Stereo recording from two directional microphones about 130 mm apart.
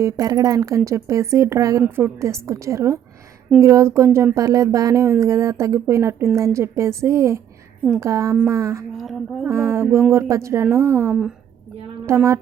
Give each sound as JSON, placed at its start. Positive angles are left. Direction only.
{"t": 0.0, "sound": "speech", "side_deg": -25}
{"t": 9.0, "sound": "a sound", "side_deg": 0}
{"t": 9.5, "sound": "speech", "side_deg": -20}